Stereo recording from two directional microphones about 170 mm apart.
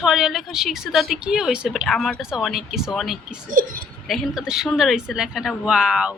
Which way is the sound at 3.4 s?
55° right (ahead or behind).